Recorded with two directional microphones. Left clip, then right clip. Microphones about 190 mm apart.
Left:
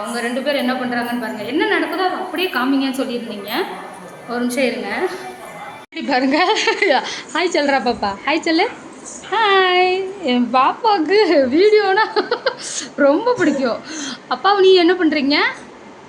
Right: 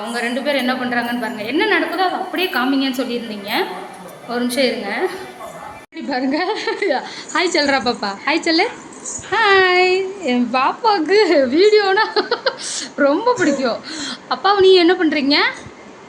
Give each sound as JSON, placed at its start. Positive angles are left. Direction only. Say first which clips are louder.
{"t": 0.1, "sound": "a woman's voice", "louder": "right 1 dB", "side_deg": -15}
{"t": 6.1, "sound": "a woman's voice", "louder": "left 4 dB", "side_deg": -5}